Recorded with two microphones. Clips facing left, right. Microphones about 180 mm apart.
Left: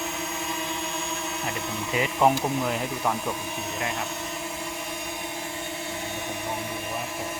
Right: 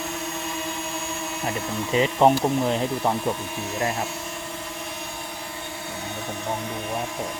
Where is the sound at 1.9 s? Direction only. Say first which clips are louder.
Right 4 dB; 25° right (ahead or behind).